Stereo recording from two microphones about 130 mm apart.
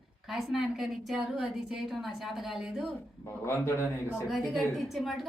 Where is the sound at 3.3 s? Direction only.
20° left (ahead or behind).